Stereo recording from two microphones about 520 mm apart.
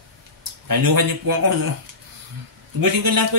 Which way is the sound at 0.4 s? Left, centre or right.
Right.